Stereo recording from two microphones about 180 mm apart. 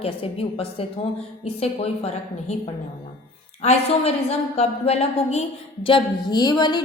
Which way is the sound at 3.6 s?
35° left (ahead or behind).